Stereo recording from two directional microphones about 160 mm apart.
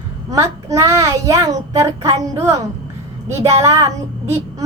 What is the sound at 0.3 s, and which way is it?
A child's voice, 20° right (ahead or behind).